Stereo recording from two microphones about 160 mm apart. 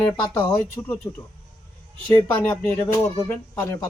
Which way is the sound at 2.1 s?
10° left (ahead or behind).